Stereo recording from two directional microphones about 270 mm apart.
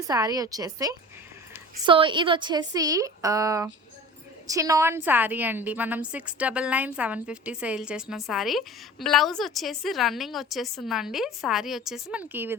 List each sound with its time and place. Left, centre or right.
0.1 s a woman's voice: centre